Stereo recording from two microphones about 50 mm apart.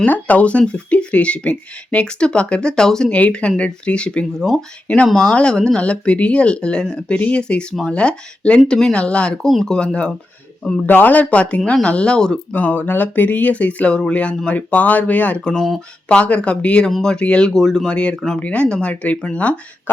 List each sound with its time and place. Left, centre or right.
0.0 s speech: left; by 3.1 s centre
3.1 s speech: left
4.4 s speech: centre
5.3 s speech: centre
7.1 s speech: left
9.5 s speech: centre
10.8 s speech: left; by 12.4 s centre
12.5 s speech: left
16.9 s speech: centre
17.2 s speech: left
17.5 s speech: centre
17.9 s speech: left